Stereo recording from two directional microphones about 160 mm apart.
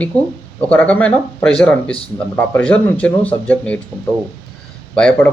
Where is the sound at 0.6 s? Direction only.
10° left (ahead or behind).